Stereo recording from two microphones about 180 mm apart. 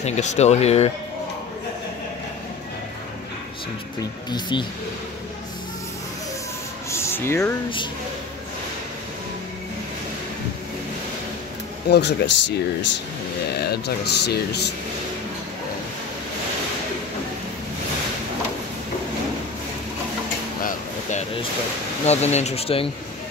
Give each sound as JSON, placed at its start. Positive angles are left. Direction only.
{"t": 0.0, "sound": "speech", "side_deg": 40}
{"t": 4.3, "sound": "speech", "side_deg": 25}
{"t": 6.9, "sound": "a sound", "side_deg": 15}
{"t": 11.9, "sound": "speech", "side_deg": 70}
{"t": 13.7, "sound": "speech", "side_deg": 65}
{"t": 22.0, "sound": "speech", "side_deg": 35}